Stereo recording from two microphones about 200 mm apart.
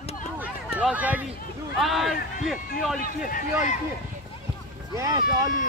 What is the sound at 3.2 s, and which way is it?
Speech, 40° left (ahead or behind).